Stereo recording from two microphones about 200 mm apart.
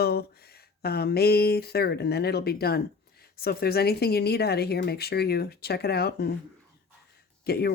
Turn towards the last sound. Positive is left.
turn(degrees=50)  # may be behind; listen again after turning